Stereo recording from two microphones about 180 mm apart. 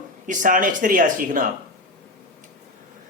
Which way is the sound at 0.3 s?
45° right (ahead or behind).